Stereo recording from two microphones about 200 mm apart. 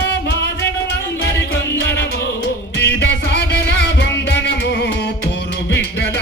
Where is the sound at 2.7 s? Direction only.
60° left (ahead or behind).